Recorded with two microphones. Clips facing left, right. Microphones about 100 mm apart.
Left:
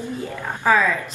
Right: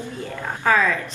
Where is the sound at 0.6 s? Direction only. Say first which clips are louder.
Left 1 dB; 10° left (ahead or behind).